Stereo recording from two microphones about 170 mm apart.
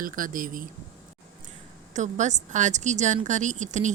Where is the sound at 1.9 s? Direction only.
45° right (ahead or behind).